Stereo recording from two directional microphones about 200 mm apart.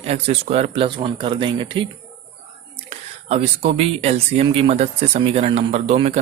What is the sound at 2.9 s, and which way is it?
Speech, 30° right (ahead or behind).